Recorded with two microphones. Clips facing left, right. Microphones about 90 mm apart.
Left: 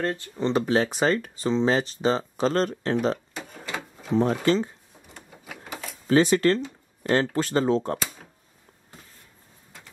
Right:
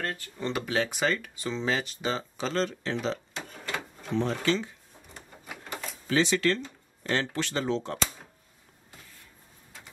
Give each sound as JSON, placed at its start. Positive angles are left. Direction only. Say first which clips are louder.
{"t": 0.0, "sound": "speech", "louder": "left 7 dB", "side_deg": 25}
{"t": 3.3, "sound": "drawer open or close", "louder": "left 1 dB", "side_deg": 0}
{"t": 4.2, "sound": "speech", "louder": "left 5 dB", "side_deg": 40}
{"t": 5.0, "sound": "a sound", "louder": "left 1 dB", "side_deg": 5}
{"t": 6.0, "sound": "speech", "louder": "left 6 dB", "side_deg": 45}